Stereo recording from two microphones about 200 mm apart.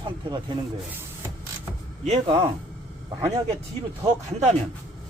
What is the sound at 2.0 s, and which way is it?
Speech, 35° right (ahead or behind).